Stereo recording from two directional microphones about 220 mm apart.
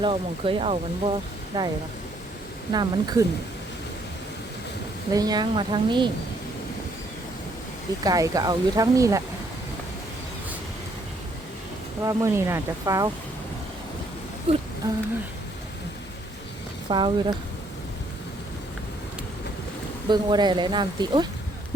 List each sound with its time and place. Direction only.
0.0 s speech: 25° right (ahead or behind)
2.7 s speech: 20° right (ahead or behind)
5.1 s speech: 15° right (ahead or behind)
8.0 s speech: 15° right (ahead or behind)
12.0 s speech: 15° right (ahead or behind)
14.5 s speech: 25° right (ahead or behind)
16.9 s speech: 20° right (ahead or behind)
20.1 s speech: 20° right (ahead or behind)